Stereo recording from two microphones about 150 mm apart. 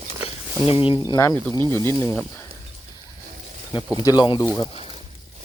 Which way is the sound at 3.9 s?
25° left (ahead or behind).